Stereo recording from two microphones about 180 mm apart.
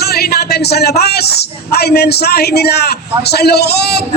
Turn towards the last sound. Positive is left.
turn(degrees=65)  # may be behind; listen again after turning